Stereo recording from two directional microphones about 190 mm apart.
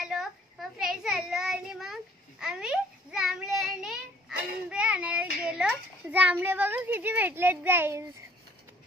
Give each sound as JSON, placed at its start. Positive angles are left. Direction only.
{"t": 0.0, "sound": "child singing", "side_deg": 0}